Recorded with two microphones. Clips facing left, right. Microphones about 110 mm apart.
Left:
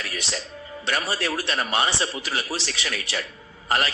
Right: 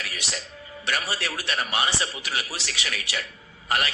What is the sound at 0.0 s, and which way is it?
Music, 30° left (ahead or behind).